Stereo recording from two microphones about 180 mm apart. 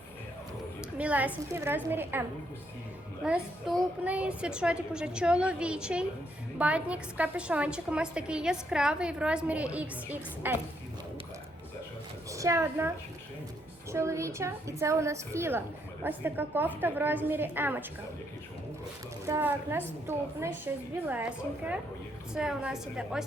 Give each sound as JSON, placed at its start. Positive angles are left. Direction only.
{"t": 0.8, "sound": "a woman's voice", "side_deg": -5}
{"t": 3.2, "sound": "a woman's voice", "side_deg": -5}
{"t": 12.3, "sound": "a woman's voice", "side_deg": -15}
{"t": 13.9, "sound": "a woman's voice", "side_deg": -15}
{"t": 19.2, "sound": "a woman's voice", "side_deg": -15}